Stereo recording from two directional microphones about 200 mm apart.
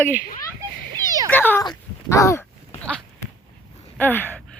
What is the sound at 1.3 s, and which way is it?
Speech, 10° left (ahead or behind).